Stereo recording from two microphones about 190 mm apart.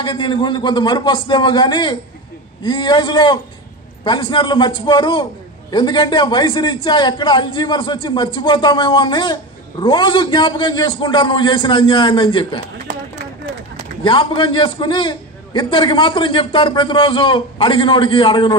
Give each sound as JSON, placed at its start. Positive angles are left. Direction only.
{"t": 0.0, "sound": "a man's voice", "side_deg": 25}
{"t": 14.0, "sound": "a man's voice", "side_deg": 25}